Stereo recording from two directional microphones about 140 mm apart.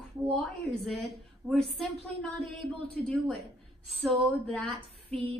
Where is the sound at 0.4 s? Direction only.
Centre (ahead or behind).